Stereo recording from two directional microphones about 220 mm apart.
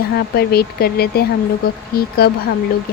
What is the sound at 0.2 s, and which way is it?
Speech, 45° left (ahead or behind).